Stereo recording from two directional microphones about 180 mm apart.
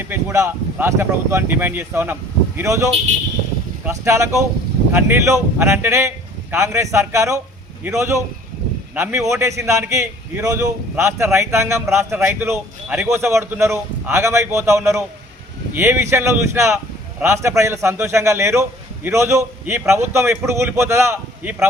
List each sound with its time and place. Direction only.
0.0 s speech: 15° right (ahead or behind)